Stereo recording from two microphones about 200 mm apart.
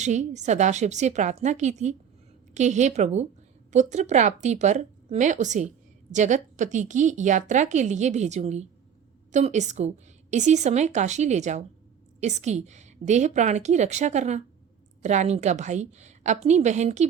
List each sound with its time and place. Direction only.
0.0 s speech: 35° right (ahead or behind)